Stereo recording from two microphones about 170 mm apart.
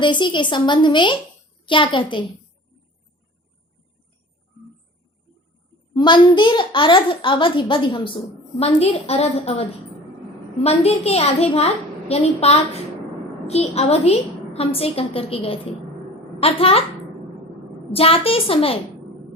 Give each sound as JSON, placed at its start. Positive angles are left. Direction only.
{"t": 0.0, "sound": "a child's voice", "side_deg": 25}
{"t": 5.9, "sound": "a child's voice", "side_deg": 25}
{"t": 17.9, "sound": "a woman's voice", "side_deg": 35}